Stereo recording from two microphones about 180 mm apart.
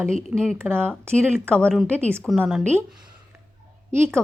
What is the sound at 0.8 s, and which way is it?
A woman's voice, 5° left (ahead or behind).